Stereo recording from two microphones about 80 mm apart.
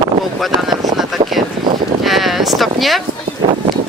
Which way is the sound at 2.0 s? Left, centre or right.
Centre.